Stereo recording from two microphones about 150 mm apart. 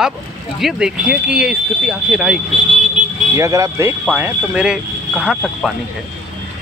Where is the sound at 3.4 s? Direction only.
20° right (ahead or behind).